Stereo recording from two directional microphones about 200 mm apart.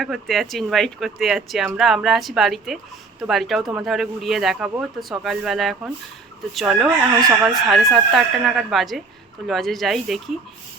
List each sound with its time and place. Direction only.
0.0 s speech: centre (ahead or behind)